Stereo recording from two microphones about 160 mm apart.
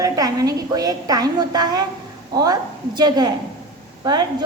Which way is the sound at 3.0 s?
25° right (ahead or behind).